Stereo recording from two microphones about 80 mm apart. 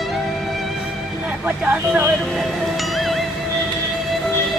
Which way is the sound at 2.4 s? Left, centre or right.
Centre.